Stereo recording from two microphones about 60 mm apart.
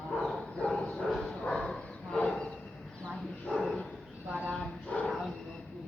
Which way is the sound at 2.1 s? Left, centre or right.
Centre.